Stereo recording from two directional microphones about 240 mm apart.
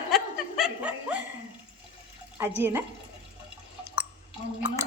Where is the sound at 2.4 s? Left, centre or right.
Centre.